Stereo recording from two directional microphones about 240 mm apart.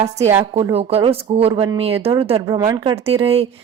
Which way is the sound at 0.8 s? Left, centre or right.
Right.